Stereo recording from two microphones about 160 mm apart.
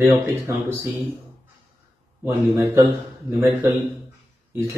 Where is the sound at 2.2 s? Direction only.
15° right (ahead or behind).